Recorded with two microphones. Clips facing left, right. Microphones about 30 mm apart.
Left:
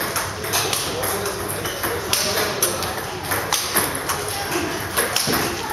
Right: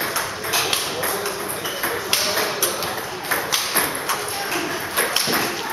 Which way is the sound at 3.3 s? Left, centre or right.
Right.